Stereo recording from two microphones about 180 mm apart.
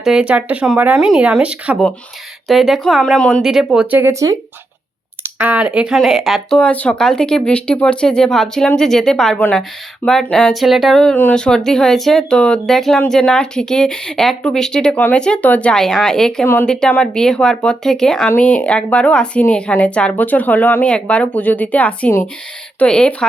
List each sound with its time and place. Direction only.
0.0 s speech: 5° right (ahead or behind)